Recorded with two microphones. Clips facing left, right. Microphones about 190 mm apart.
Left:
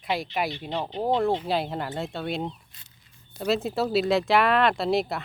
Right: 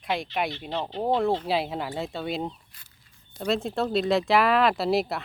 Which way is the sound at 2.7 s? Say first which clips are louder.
Left 1 dB; 20° left (ahead or behind).